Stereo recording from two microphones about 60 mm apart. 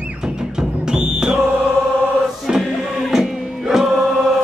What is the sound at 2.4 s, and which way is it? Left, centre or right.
Music, centre.